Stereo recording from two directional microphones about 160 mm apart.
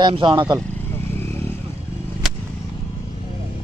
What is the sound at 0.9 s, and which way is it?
Vehicle, 15° left (ahead or behind).